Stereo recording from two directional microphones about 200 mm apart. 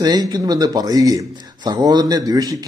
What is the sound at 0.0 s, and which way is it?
Speech, 20° right (ahead or behind).